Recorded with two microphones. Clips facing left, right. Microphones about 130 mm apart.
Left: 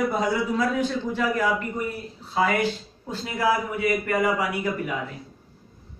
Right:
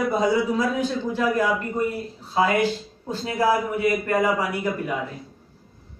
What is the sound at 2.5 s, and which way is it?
Speech, 15° right (ahead or behind).